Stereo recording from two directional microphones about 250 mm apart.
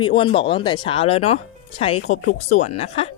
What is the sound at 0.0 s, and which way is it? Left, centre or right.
Speech, left.